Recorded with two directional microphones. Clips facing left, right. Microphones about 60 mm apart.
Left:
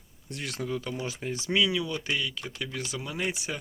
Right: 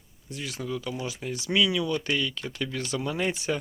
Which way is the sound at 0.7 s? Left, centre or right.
Left.